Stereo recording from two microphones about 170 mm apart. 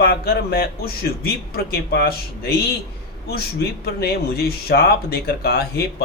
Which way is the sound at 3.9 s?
70° left (ahead or behind).